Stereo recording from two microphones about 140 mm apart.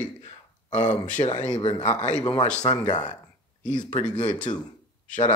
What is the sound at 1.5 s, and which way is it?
Speech, 35° left (ahead or behind).